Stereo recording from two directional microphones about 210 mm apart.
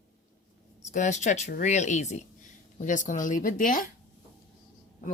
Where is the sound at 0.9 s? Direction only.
35° left (ahead or behind).